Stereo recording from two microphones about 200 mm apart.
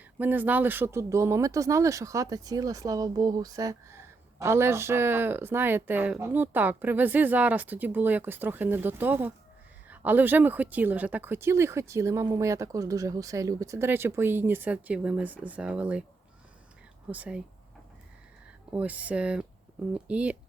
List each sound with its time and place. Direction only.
0.2 s speech: 10° right (ahead or behind)
17.1 s speech: 5° right (ahead or behind)
18.7 s speech: 5° right (ahead or behind)